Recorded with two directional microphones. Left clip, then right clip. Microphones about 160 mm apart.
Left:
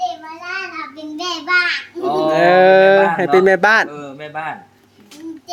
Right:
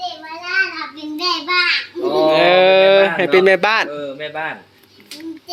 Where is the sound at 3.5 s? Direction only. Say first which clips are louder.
Left 2 dB; 35° left (ahead or behind).